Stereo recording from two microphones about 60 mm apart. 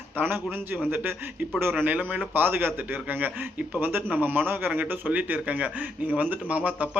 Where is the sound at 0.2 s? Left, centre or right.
Right.